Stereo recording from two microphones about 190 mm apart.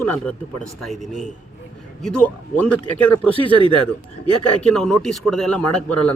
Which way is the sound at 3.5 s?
25° right (ahead or behind).